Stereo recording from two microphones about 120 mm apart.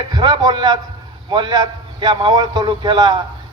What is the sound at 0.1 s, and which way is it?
A man's voice, 35° right (ahead or behind).